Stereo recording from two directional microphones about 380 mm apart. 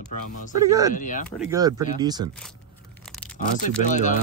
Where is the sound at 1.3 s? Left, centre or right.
Centre.